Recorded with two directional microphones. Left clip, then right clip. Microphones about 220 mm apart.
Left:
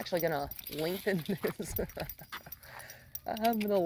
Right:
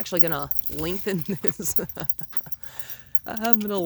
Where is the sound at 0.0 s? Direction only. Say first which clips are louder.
Right 4 dB; 40° right (ahead or behind).